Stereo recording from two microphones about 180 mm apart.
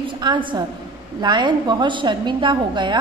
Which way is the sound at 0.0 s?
25° right (ahead or behind).